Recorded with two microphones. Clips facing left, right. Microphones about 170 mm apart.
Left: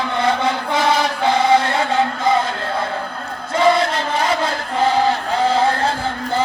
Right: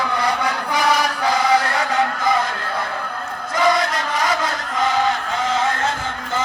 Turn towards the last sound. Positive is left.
turn(degrees=35)  # may be behind; listen again after turning